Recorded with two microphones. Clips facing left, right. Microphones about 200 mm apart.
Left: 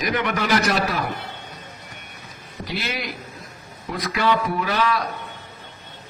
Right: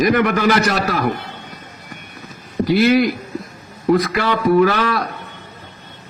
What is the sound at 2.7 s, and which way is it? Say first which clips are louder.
Speech: right 16 dB; 55° right (ahead or behind).